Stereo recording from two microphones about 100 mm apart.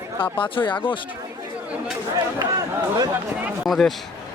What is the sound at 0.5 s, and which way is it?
Speech, 55° left (ahead or behind).